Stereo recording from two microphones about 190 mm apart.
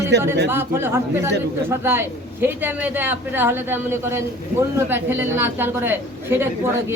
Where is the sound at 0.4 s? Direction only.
10° right (ahead or behind).